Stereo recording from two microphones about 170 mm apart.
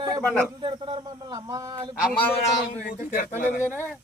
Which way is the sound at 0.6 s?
25° right (ahead or behind).